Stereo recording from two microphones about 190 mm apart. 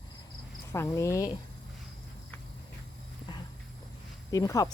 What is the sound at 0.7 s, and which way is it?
Speech, 15° left (ahead or behind).